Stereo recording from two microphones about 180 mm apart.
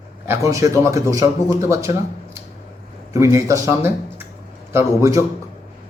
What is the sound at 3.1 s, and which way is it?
A man's voice, 15° right (ahead or behind).